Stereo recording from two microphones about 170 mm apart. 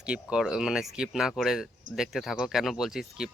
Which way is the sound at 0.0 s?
5° right (ahead or behind).